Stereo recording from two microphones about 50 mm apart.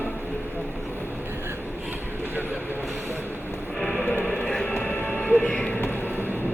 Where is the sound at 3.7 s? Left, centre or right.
Centre.